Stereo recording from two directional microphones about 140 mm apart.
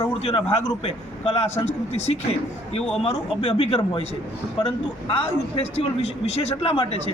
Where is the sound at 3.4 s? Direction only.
40° left (ahead or behind).